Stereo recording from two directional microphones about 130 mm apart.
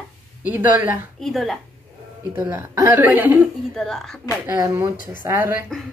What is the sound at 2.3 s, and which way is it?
Speech, 15° right (ahead or behind).